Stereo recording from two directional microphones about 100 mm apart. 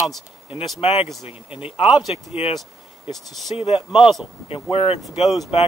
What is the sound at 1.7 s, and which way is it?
Speech, 70° left (ahead or behind).